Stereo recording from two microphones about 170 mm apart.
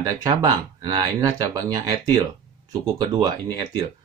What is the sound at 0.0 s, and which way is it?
Speech, 20° right (ahead or behind).